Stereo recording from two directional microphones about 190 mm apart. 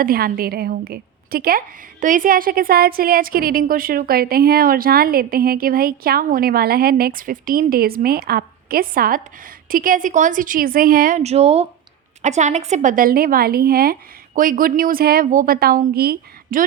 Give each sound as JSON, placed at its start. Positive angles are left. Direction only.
{"t": 0.0, "sound": "a woman's voice", "side_deg": -50}